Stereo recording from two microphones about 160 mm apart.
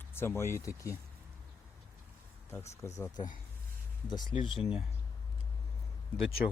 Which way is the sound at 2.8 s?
20° left (ahead or behind).